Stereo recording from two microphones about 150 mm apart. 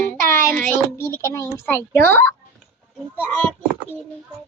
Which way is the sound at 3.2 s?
10° left (ahead or behind).